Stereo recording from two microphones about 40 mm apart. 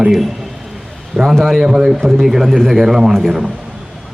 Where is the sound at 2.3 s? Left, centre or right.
Centre.